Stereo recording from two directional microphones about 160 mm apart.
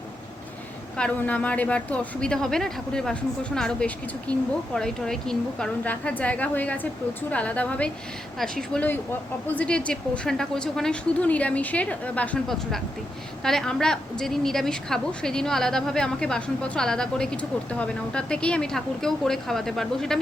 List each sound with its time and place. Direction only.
0.9 s a woman's voice: 10° left (ahead or behind)